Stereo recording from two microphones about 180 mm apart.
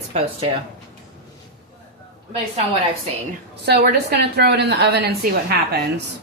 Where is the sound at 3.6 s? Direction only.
60° right (ahead or behind).